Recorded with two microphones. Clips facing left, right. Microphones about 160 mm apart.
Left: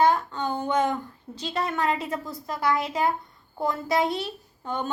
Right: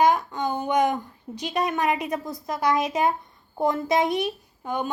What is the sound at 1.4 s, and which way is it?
A woman's voice, 15° right (ahead or behind).